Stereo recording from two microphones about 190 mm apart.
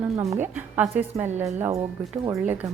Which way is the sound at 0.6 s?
10° right (ahead or behind).